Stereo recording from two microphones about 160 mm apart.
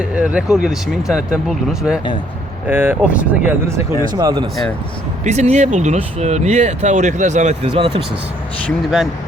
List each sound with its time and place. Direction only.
0.0 s speech: 5° right (ahead or behind)
4.1 s speech: 25° right (ahead or behind)
5.2 s speech: 45° right (ahead or behind)